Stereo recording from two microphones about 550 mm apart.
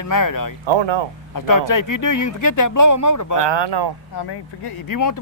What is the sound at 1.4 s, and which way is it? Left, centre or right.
Speech, left.